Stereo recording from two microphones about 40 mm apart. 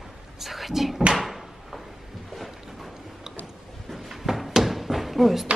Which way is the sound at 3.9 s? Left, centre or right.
Centre.